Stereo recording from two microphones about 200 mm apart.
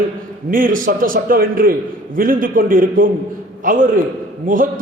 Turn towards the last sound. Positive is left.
turn(degrees=-40)  # may be behind; listen again after turning